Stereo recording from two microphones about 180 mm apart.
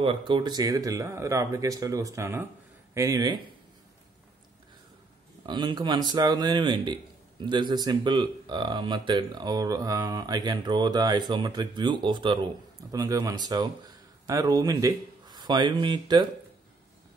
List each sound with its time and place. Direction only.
0.0 s a man's voice: 30° right (ahead or behind)
5.5 s a man's voice: 25° right (ahead or behind)